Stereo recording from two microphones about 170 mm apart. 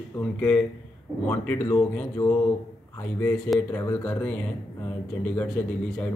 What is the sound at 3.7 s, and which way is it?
Speech, 20° left (ahead or behind).